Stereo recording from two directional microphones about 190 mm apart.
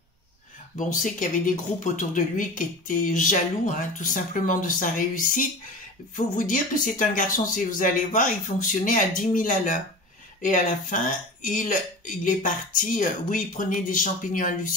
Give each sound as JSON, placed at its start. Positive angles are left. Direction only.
{"t": 0.7, "sound": "speech", "side_deg": 40}